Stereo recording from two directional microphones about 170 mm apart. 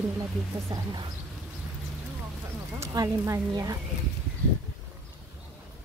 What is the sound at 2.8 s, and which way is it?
Speech, 20° right (ahead or behind).